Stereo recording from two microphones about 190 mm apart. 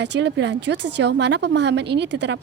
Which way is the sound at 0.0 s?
65° right (ahead or behind).